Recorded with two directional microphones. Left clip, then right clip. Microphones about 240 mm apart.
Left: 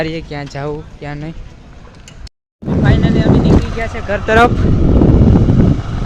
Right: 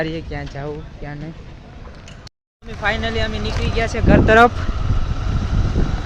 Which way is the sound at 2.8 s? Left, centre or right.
Centre.